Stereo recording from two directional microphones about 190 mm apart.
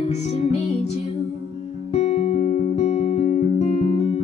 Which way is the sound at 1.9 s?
35° left (ahead or behind).